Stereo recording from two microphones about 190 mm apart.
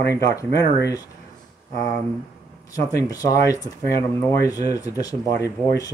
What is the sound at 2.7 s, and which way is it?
Speech, 20° left (ahead or behind).